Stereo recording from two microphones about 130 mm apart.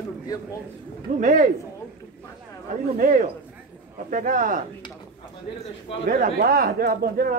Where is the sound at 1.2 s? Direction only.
80° right.